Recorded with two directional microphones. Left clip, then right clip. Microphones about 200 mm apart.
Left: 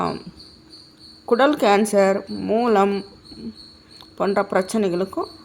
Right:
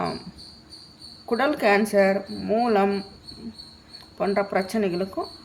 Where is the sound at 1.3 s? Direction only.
25° left (ahead or behind).